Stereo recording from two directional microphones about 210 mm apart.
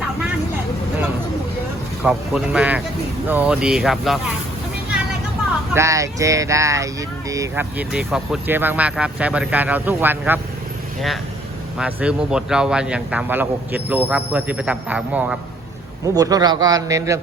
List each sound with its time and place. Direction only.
2.0 s speech: 5° right (ahead or behind)
5.7 s speech: 15° right (ahead or behind)
11.8 s speech: 5° right (ahead or behind)
16.1 s speech: 15° right (ahead or behind)